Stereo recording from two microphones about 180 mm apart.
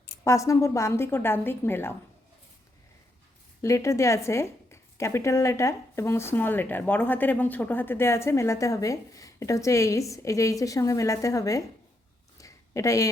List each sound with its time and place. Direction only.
0.3 s a woman's voice: 15° left (ahead or behind)
3.6 s a woman's voice: 15° left (ahead or behind)
12.4 s a sound: 15° left (ahead or behind)